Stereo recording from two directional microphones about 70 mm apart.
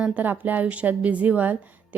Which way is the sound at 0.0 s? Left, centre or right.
Right.